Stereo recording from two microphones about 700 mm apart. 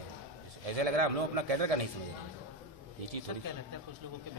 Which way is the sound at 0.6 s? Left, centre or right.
Right.